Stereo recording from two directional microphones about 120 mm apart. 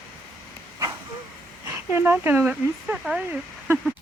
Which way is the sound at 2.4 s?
5° right (ahead or behind).